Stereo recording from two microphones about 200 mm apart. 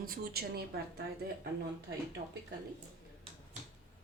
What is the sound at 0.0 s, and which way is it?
Speech, 50° right (ahead or behind).